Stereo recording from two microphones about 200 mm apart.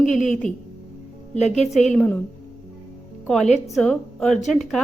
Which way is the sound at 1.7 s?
Centre (ahead or behind).